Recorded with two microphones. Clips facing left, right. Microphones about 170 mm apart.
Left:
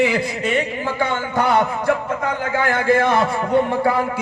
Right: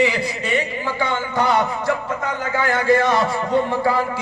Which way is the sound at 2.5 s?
55° left (ahead or behind).